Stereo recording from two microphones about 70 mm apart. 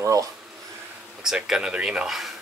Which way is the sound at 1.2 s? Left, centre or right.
Centre.